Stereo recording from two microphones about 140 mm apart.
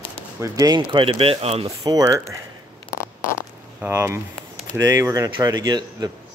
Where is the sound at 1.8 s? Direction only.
25° right (ahead or behind).